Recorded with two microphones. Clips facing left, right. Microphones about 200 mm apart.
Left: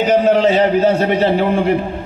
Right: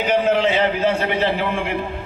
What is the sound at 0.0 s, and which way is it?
A man's voice, 40° left (ahead or behind).